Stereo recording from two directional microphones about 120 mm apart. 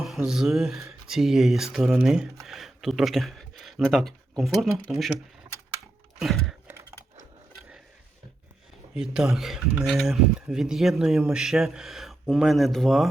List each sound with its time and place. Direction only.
0.3 s speech: centre (ahead or behind)
6.1 s a sound: centre (ahead or behind)
9.0 s speech: 5° right (ahead or behind)